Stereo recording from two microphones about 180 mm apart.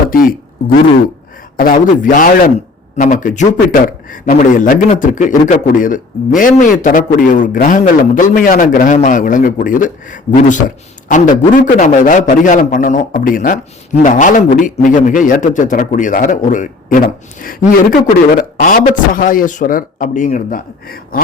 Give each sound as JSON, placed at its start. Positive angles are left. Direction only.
{"t": 0.1, "sound": "speech", "side_deg": 50}
{"t": 1.5, "sound": "a man's voice", "side_deg": 50}